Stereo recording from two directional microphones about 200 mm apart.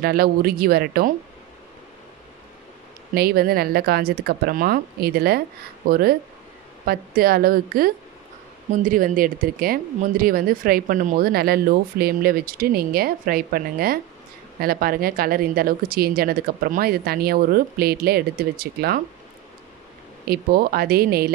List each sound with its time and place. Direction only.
0.0 s speech: 50° right (ahead or behind)
3.2 s speech: 50° right (ahead or behind)
20.2 s speech: 50° right (ahead or behind)